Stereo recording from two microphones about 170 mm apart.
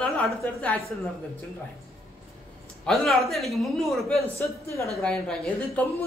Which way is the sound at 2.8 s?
Centre (ahead or behind).